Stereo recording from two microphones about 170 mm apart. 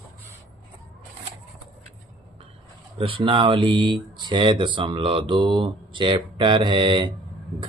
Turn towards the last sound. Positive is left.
turn(degrees=-30)  # may be behind; listen again after turning